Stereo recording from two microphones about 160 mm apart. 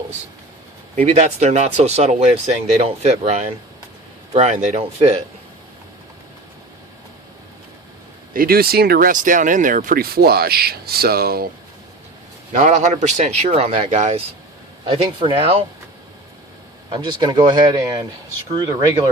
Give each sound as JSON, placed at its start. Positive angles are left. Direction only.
{"t": 0.9, "sound": "speech", "side_deg": -45}
{"t": 8.3, "sound": "speech", "side_deg": -65}
{"t": 12.5, "sound": "speech", "side_deg": -50}
{"t": 14.8, "sound": "speech", "side_deg": -30}
{"t": 16.9, "sound": "speech", "side_deg": -25}